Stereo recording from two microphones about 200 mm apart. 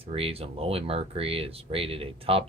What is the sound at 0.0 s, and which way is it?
Speech, 30° right (ahead or behind).